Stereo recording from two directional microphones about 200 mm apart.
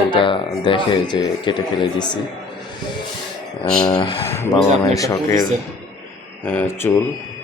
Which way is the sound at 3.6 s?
20° left (ahead or behind).